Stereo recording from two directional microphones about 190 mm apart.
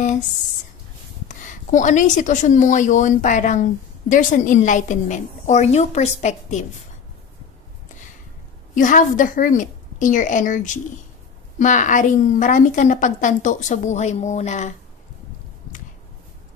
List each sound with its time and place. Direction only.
1.3 s a woman's voice: 40° left (ahead or behind)
8.7 s a woman's voice: 45° left (ahead or behind)